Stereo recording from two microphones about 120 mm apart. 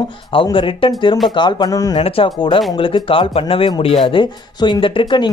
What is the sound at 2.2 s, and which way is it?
Speech, 45° left (ahead or behind).